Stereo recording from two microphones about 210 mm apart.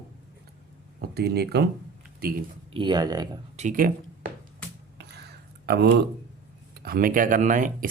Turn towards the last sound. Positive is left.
turn(degrees=-40)  # may be behind; listen again after turning